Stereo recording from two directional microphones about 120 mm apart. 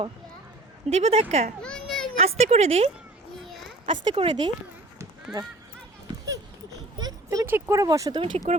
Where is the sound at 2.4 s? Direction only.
65° right (ahead or behind).